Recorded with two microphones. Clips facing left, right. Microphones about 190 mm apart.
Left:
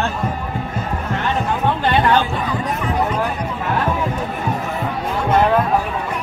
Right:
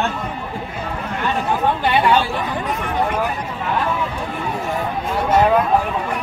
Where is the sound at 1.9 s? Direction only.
10° right (ahead or behind).